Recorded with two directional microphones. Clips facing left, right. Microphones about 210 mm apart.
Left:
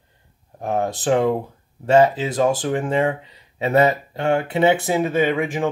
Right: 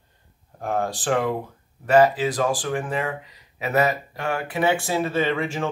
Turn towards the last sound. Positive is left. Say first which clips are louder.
# left 4 dB
turn(degrees=15)  # may be behind; listen again after turning